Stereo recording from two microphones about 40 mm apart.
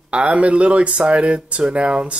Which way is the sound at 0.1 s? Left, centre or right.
Right.